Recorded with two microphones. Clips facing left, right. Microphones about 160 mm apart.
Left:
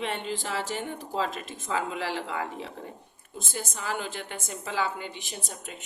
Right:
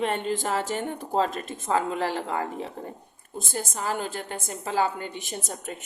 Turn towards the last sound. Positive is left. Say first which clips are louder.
# right 5 dB
turn(degrees=-45)  # may be behind; listen again after turning